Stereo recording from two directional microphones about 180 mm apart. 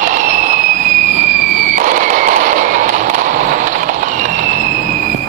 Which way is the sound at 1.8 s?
45° right (ahead or behind).